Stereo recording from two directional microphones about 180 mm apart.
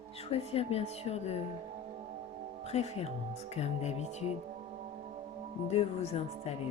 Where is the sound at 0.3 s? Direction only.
35° left (ahead or behind).